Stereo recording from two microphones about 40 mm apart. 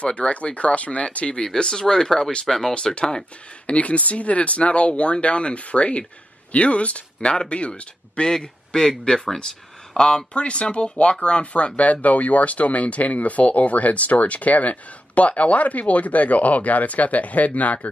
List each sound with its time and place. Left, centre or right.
0.0 s speech: left
1.3 s speech: centre
2.7 s speech: left